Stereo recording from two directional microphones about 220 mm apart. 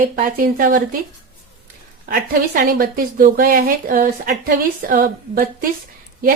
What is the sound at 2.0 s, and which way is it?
A woman's voice, 40° right (ahead or behind).